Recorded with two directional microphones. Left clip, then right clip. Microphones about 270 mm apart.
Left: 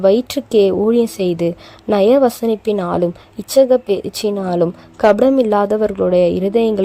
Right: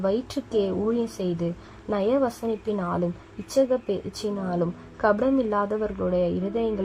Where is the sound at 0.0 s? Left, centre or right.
Left.